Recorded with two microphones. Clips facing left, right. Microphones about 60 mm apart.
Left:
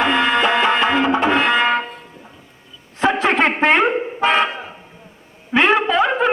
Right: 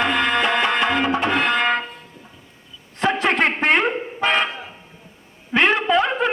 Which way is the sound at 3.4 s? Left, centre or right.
Left.